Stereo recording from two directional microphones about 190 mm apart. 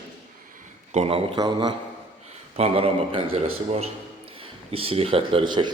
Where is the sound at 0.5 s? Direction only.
35° right (ahead or behind).